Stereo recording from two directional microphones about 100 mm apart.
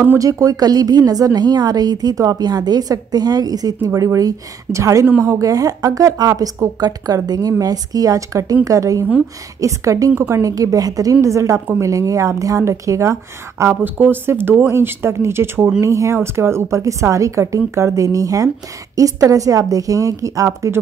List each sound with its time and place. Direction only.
0.2 s a woman's voice: 35° right (ahead or behind)
13.8 s a woman's voice: 20° right (ahead or behind)